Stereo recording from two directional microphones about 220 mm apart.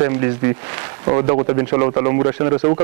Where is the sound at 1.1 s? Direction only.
25° right (ahead or behind).